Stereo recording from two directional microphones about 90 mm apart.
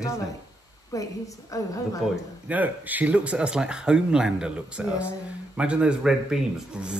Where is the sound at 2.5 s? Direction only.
20° right (ahead or behind).